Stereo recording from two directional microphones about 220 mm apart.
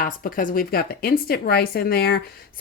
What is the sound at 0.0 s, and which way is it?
A woman's voice, 40° left (ahead or behind).